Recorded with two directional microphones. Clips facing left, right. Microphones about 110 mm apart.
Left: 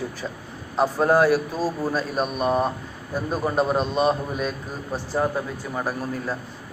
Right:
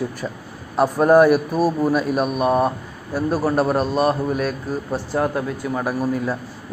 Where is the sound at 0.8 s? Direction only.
10° right (ahead or behind).